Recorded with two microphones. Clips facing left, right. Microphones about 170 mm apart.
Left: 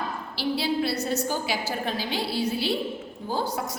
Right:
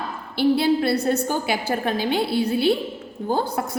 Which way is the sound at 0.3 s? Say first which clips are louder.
Right 8 dB; 55° right (ahead or behind).